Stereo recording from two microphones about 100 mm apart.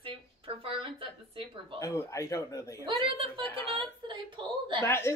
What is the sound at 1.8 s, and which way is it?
Speech, 35° left (ahead or behind).